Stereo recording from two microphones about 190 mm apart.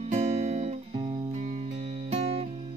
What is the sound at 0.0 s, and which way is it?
Music, 35° right (ahead or behind).